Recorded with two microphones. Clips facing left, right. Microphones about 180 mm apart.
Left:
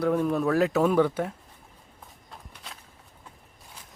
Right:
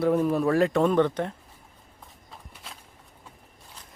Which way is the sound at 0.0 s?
5° right (ahead or behind).